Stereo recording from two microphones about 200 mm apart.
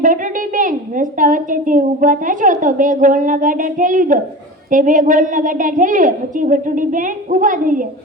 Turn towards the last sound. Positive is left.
turn(degrees=-40)  # may be behind; listen again after turning